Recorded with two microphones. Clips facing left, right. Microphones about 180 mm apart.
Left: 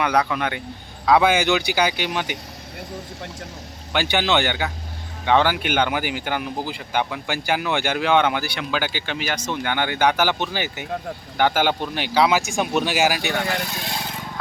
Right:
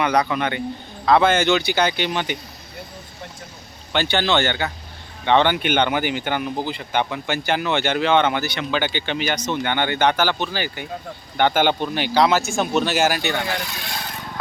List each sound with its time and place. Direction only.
0.0 s speech: 5° left (ahead or behind)
3.9 s speech: 10° left (ahead or behind)
11.3 s speech: 5° left (ahead or behind)